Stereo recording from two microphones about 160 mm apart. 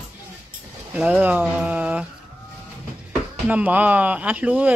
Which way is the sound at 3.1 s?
10° right (ahead or behind).